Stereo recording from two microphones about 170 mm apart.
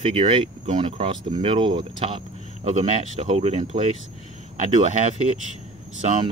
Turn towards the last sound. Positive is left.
turn(degrees=-45)  # may be behind; listen again after turning